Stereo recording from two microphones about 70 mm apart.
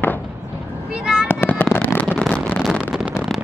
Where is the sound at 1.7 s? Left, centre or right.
Left.